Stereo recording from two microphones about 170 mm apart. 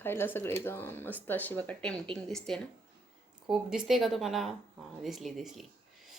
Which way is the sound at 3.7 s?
Centre (ahead or behind).